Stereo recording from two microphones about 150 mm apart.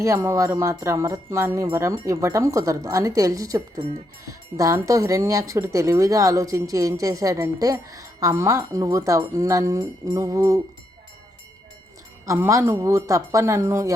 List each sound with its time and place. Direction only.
0.0 s speech: 20° right (ahead or behind)
12.2 s speech: 20° right (ahead or behind)